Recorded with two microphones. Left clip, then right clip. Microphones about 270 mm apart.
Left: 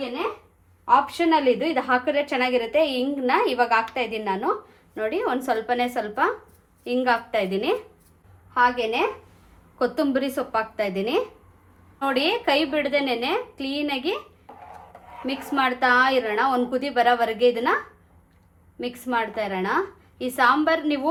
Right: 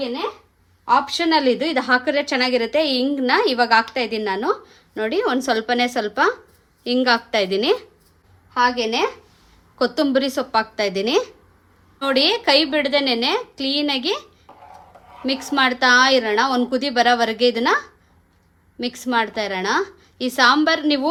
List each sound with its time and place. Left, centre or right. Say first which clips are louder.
0.9 s a woman's voice: right 1 dB; right
15.3 s a woman's voice: right 5 dB; right
18.8 s a woman's voice: right 4 dB; right